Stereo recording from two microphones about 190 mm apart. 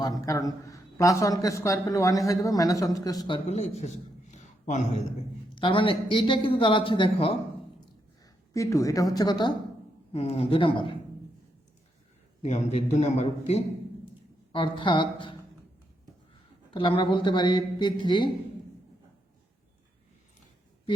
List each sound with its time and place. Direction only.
0.3 s a man's voice: 15° left (ahead or behind)
3.4 s a man's voice: 35° left (ahead or behind)
5.5 s speech: 25° left (ahead or behind)
8.5 s a man's voice: 15° left (ahead or behind)
12.4 s a man's voice: 35° left (ahead or behind)
16.7 s speech: 25° left (ahead or behind)